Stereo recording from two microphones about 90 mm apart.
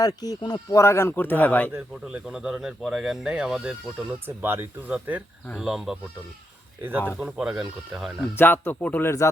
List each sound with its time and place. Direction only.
0.0 s speech: 45° left (ahead or behind)
0.8 s speech: 30° left (ahead or behind)
2.0 s speech: 10° right (ahead or behind)
5.5 s speech: 5° right (ahead or behind)
7.2 s speech: 10° right (ahead or behind)
8.4 s speech: 25° left (ahead or behind)
9.0 s speech: 35° left (ahead or behind)